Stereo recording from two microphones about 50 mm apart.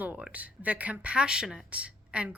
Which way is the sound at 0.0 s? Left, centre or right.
Right.